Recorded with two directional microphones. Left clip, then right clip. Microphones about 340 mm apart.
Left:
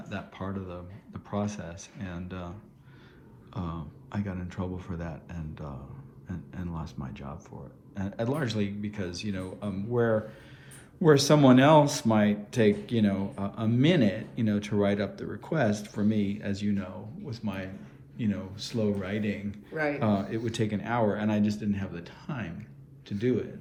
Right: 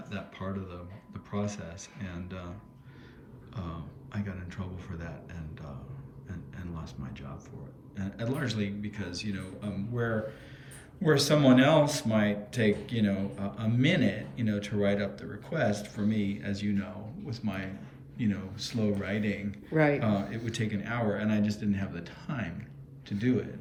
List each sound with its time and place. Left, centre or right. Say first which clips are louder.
0.1 s speech: left 2 dB; centre
19.7 s speech: right 4 dB; right
20.0 s speech: left 3 dB; centre